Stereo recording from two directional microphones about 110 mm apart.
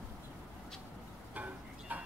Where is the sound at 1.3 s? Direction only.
15° right (ahead or behind).